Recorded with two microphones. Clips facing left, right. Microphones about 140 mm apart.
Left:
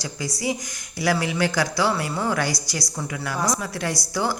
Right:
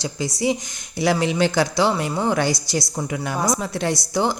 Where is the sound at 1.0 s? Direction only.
25° right (ahead or behind).